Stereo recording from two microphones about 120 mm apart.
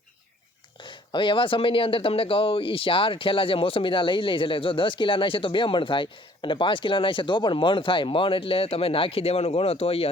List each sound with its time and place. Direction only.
0.8 s speech: 45° left (ahead or behind)